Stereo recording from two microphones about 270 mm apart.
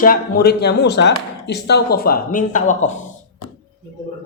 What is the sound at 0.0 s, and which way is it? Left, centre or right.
Speech, left.